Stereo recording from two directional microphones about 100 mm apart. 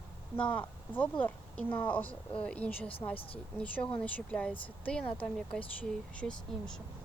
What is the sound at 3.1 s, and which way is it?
Speech, 70° left (ahead or behind).